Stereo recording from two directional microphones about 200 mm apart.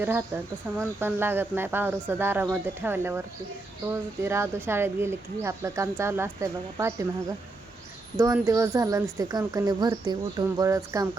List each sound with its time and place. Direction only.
0.0 s speech: 10° right (ahead or behind)
4.2 s speech: 15° right (ahead or behind)
8.2 s speech: 15° right (ahead or behind)